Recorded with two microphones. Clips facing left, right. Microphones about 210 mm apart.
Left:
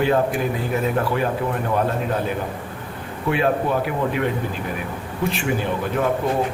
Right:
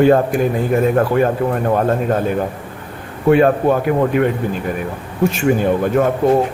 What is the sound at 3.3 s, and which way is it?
Speech, 50° right (ahead or behind).